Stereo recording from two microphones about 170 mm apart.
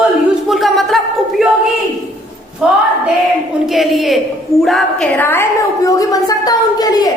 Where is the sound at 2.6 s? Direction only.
5° right (ahead or behind).